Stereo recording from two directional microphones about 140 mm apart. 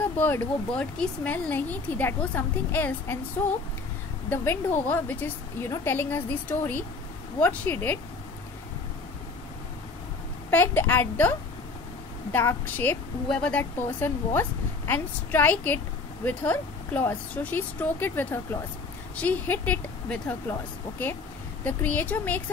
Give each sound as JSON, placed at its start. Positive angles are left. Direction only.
{"t": 0.2, "sound": "a woman's voice", "side_deg": 10}
{"t": 4.8, "sound": "a woman's voice", "side_deg": 15}
{"t": 10.5, "sound": "a woman's voice", "side_deg": 15}
{"t": 21.6, "sound": "a woman's voice", "side_deg": 10}